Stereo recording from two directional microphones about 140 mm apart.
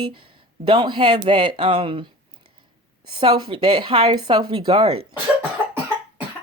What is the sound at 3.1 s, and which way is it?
A woman's voice, 35° right (ahead or behind).